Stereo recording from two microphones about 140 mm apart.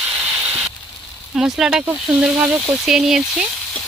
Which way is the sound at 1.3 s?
5° right (ahead or behind).